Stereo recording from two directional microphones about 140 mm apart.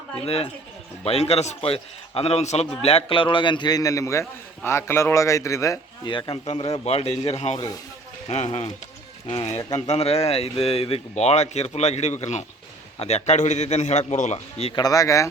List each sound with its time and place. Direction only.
0.3 s a man's voice: 45° left (ahead or behind); by 5.8 s 20° left (ahead or behind)
6.1 s speech: 35° left (ahead or behind); by 8.4 s 55° left (ahead or behind)
9.2 s speech: 40° left (ahead or behind)
14.8 s a man's voice: 25° left (ahead or behind)